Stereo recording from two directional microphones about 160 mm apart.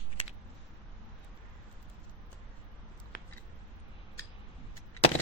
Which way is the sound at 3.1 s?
60° left (ahead or behind).